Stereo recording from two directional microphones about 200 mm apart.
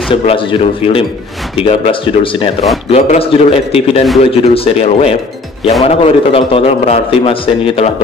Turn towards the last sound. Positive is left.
turn(degrees=30)  # may be behind; listen again after turning